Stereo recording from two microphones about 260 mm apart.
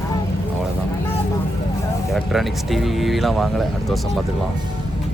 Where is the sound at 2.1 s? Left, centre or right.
Centre.